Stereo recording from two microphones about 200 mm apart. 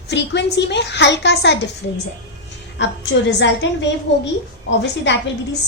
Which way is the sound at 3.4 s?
60° left (ahead or behind).